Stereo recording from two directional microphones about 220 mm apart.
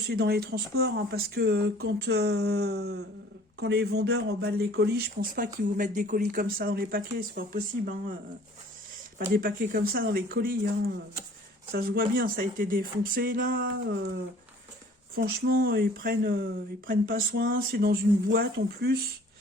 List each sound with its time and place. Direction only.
0.1 s speech: 45° right (ahead or behind)
9.3 s speech: 40° right (ahead or behind)
11.7 s speech: 40° right (ahead or behind)
13.5 s speech: 55° right (ahead or behind)
15.1 s speech: 45° right (ahead or behind)